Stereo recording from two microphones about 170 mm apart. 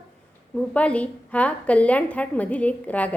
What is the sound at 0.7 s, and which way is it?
A woman's voice, 10° left (ahead or behind).